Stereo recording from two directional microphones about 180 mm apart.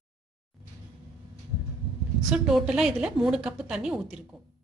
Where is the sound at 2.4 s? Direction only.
5° right (ahead or behind).